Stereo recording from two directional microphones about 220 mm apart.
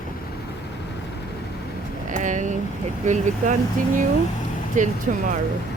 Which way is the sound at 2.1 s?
35° right (ahead or behind).